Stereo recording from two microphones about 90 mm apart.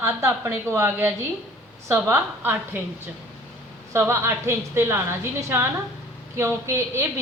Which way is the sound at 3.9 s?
30° right (ahead or behind).